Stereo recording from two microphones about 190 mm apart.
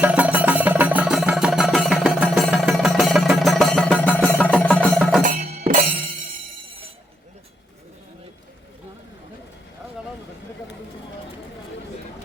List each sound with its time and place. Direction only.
0.0 s music: 5° right (ahead or behind)
5.2 s music: 45° right (ahead or behind)